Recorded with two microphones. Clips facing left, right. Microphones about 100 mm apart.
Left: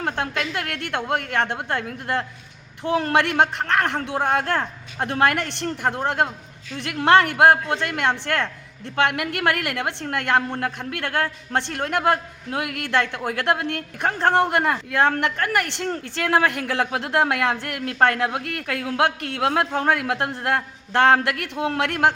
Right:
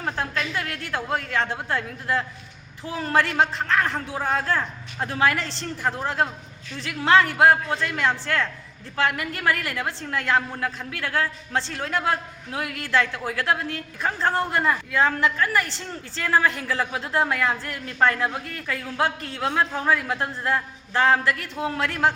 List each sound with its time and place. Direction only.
0.0 s a woman's voice: 60° left (ahead or behind)